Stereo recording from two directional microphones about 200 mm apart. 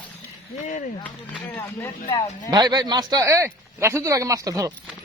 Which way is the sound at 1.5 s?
10° left (ahead or behind).